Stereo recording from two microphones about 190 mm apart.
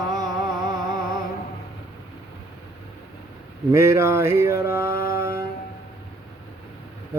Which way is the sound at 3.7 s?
15° right (ahead or behind).